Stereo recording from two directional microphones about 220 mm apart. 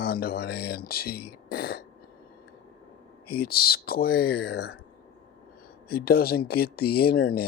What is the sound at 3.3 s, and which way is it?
Speech, 45° left (ahead or behind).